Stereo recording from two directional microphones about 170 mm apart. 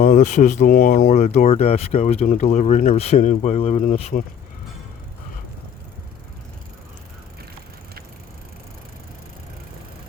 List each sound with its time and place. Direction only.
0.0 s speech: 50° left (ahead or behind)
1.1 s speech: 40° left (ahead or behind)